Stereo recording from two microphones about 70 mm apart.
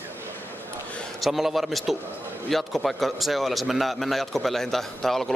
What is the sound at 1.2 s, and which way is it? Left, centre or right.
A man's voice, centre.